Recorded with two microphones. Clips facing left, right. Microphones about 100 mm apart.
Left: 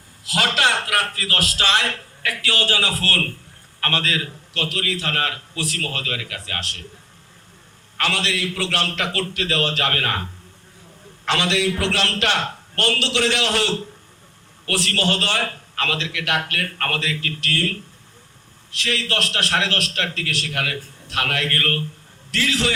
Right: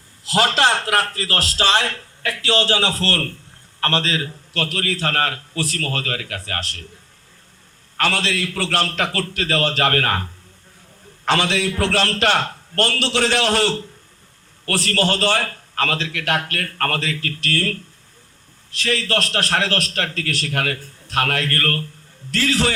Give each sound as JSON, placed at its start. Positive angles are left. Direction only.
{"t": 0.3, "sound": "a man's voice", "side_deg": -30}
{"t": 4.5, "sound": "a man's voice", "side_deg": -40}
{"t": 7.9, "sound": "a man's voice", "side_deg": -40}
{"t": 11.3, "sound": "a man's voice", "side_deg": -40}